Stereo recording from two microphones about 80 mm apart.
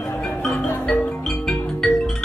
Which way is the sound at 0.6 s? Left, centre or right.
Left.